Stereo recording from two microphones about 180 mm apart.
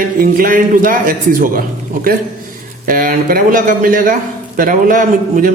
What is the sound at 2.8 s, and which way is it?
A man's voice, 55° right (ahead or behind).